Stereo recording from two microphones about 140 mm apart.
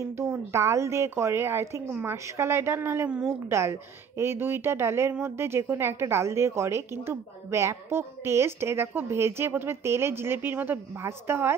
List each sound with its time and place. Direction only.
0.2 s speech: 20° right (ahead or behind)